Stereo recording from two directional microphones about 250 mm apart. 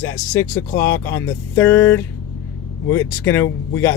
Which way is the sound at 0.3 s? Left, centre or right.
Centre.